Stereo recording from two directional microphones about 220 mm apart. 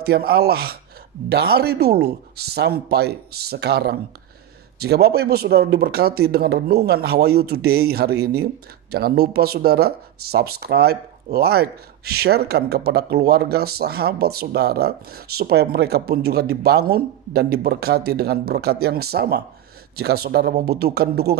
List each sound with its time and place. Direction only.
0.0 s speech: 45° right (ahead or behind)